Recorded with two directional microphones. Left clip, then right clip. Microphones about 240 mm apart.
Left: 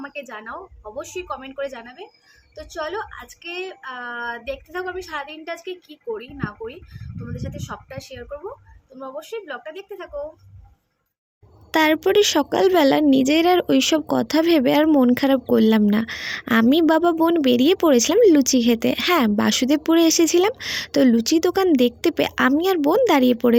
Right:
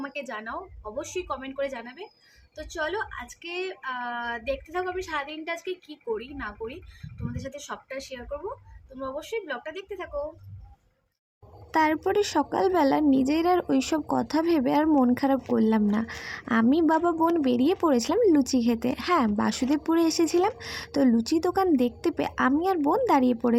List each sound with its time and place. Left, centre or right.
0.0 s a woman's voice: centre
11.7 s a woman's voice: left